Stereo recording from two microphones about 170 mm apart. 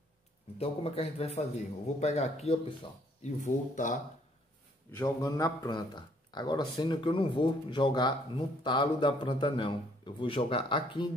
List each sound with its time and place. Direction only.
0.6 s speech: 40° left (ahead or behind)
4.9 s speech: 20° left (ahead or behind)